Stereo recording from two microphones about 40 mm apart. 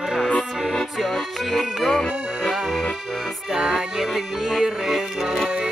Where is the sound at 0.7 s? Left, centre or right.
Centre.